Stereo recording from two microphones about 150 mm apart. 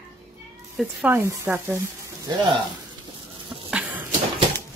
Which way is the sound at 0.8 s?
5° right (ahead or behind).